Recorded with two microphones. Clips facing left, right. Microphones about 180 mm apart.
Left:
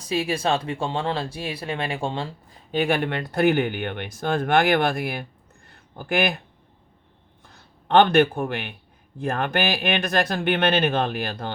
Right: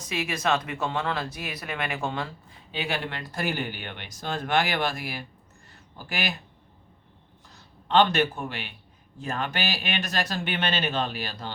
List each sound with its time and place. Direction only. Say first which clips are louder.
0.0 s speech: left 5 dB; 35° left (ahead or behind)
2.7 s speech: left 9 dB; 50° left (ahead or behind)
7.4 s a man's voice: left 4 dB; 55° left (ahead or behind)